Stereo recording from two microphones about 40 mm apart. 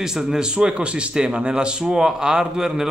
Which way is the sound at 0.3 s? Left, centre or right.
Right.